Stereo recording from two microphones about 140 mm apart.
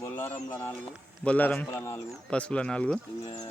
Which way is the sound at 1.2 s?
10° left (ahead or behind).